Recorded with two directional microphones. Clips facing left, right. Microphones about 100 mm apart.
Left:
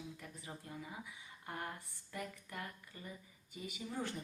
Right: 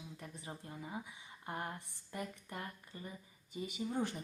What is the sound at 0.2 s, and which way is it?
Speech, 25° right (ahead or behind).